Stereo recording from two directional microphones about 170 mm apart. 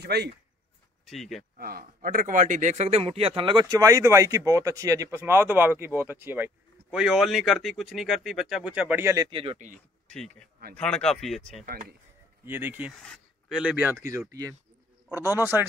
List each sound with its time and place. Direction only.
0.0 s speech: 75° right (ahead or behind)
1.0 s speech: centre (ahead or behind)
1.6 s a man's voice: 60° right (ahead or behind); by 9.3 s 15° right (ahead or behind)
9.3 s speech: 30° right (ahead or behind)
10.0 s a sound: 5° left (ahead or behind)
10.8 s speech: 5° left (ahead or behind)
11.6 s speech: 50° right (ahead or behind)
12.4 s a man's voice: 10° right (ahead or behind)
13.0 s a sound: 5° left (ahead or behind)
13.6 s a man's voice: 10° right (ahead or behind)
15.0 s a man's voice: 15° right (ahead or behind)